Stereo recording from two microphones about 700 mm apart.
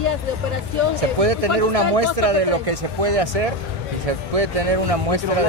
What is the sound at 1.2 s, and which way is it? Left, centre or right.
Speech, right.